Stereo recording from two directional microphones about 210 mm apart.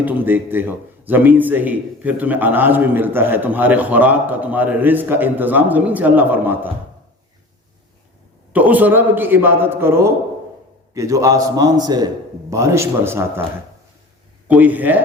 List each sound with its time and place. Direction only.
0.0 s a man's voice: 10° right (ahead or behind)
8.5 s a man's voice: 5° right (ahead or behind)
14.4 s a man's voice: 10° right (ahead or behind)